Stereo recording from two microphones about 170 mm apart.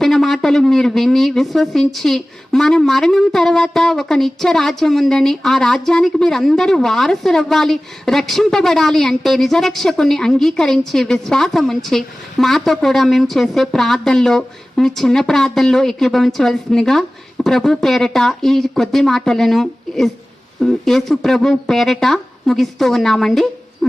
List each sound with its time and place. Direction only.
0.0 s speech: centre (ahead or behind)